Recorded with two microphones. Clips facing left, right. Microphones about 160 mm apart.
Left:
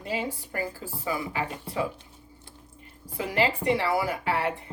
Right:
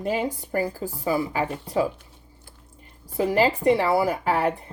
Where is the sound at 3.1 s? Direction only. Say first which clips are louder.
Right 5 dB; 40° right (ahead or behind).